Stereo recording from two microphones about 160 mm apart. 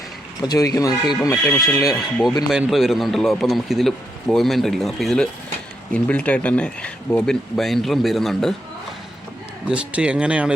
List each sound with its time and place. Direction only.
0.4 s speech: 25° left (ahead or behind)
2.5 s speech: centre (ahead or behind)
9.6 s speech: 5° right (ahead or behind)